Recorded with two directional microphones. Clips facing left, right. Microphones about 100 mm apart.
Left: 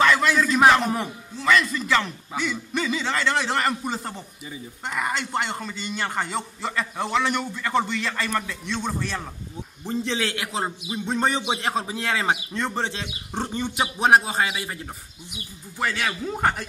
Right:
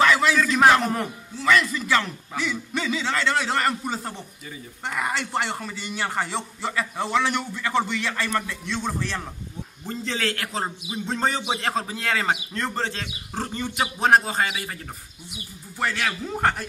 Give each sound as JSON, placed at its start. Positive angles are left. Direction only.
{"t": 0.0, "sound": "a man's voice", "side_deg": 0}
{"t": 13.5, "sound": "speech", "side_deg": 5}
{"t": 15.8, "sound": "a man's voice", "side_deg": 0}